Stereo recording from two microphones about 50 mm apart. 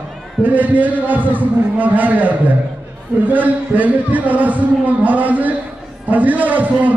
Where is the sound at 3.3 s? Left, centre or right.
Right.